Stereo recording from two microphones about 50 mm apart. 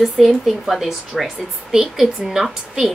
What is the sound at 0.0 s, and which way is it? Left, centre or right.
A woman's voice, centre.